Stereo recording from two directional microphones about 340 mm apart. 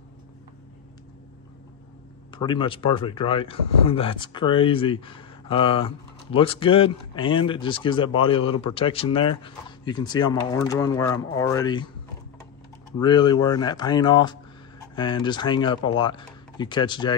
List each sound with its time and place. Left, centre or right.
2.3 s speech: centre
13.0 s speech: centre